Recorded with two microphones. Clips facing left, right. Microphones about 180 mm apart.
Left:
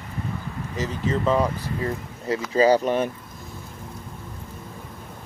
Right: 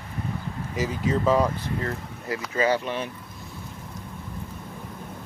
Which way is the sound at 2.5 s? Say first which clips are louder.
Left 6 dB; 35° left (ahead or behind).